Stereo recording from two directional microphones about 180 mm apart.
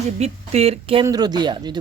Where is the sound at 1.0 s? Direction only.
20° right (ahead or behind).